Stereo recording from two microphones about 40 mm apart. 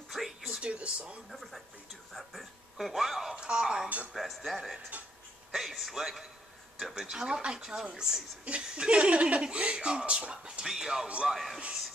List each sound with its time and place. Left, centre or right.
0.1 s a sound: centre
0.6 s speech: right
1.3 s speech: centre
3.3 s speech: right
3.6 s speech: centre
4.1 s speech: centre
4.9 s speech: right
5.5 s speech: centre
7.1 s speech: right
10.6 s speech: centre